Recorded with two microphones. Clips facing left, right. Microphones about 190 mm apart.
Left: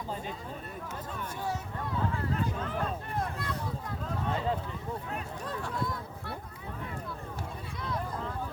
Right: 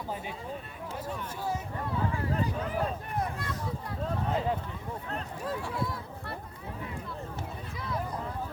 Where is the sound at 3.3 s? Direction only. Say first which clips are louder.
Even; centre (ahead or behind).